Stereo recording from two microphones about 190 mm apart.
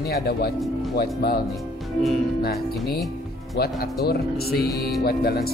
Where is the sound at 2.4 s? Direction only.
55° left (ahead or behind).